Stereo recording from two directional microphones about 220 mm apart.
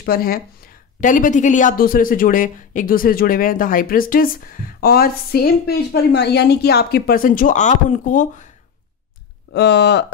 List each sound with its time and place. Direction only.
0.0 s speech: 45° left (ahead or behind)
9.5 s speech: 50° left (ahead or behind)